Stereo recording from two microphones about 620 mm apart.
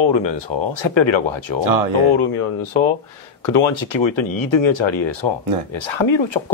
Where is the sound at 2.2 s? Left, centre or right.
Left.